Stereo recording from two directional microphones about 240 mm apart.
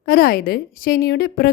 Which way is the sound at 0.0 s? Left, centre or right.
Left.